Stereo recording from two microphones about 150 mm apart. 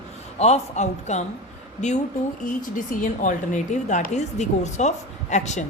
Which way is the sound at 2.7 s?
60° left (ahead or behind).